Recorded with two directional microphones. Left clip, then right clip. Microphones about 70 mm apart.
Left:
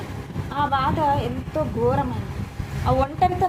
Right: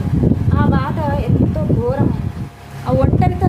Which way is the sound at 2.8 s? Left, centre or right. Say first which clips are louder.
Right 3 dB; right.